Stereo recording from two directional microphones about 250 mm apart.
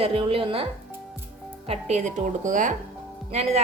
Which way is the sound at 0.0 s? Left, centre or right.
Right.